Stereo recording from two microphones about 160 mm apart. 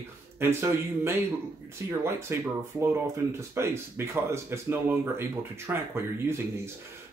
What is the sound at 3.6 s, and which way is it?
Speech, 15° right (ahead or behind).